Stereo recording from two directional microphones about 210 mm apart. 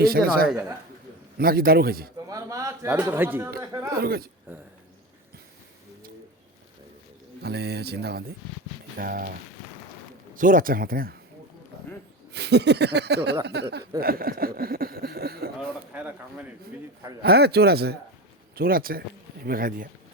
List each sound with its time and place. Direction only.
0.0 s speech: 45° right (ahead or behind)
2.2 s a man's voice: 15° right (ahead or behind)
3.9 s speech: 45° right (ahead or behind)
7.4 s speech: 50° right (ahead or behind)
10.3 s speech: 40° right (ahead or behind)
12.3 s speech: 55° right (ahead or behind)
15.9 s speech: 5° right (ahead or behind)
17.2 s speech: 50° right (ahead or behind)